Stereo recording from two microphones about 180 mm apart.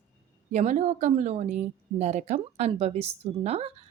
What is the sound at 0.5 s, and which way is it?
A woman's voice, 40° right (ahead or behind).